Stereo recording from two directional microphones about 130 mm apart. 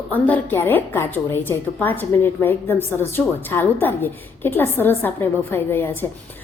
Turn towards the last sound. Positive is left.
turn(degrees=15)  # may be behind; listen again after turning